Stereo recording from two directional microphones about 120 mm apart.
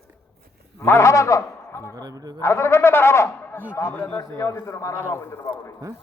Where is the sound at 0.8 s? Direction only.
20° left (ahead or behind).